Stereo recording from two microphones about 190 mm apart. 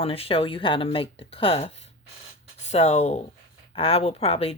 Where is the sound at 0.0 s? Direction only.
30° left (ahead or behind).